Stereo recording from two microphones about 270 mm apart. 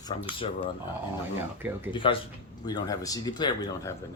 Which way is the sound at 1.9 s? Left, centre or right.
Centre.